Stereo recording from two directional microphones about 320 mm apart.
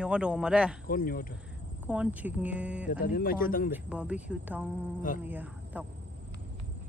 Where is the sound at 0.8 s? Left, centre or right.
Left.